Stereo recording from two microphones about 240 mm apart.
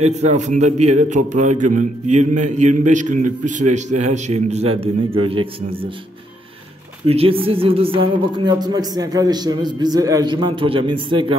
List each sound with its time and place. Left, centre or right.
0.0 s a man's voice: right
7.1 s speech: right